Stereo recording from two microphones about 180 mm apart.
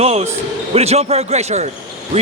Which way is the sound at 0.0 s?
35° right (ahead or behind).